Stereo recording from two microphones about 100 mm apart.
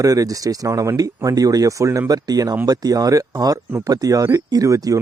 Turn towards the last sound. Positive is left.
turn(degrees=-35)  # may be behind; listen again after turning